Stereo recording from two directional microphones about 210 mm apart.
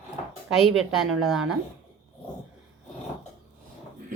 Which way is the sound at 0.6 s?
Centre (ahead or behind).